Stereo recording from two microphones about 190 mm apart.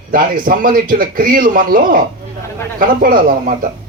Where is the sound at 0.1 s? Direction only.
45° right (ahead or behind).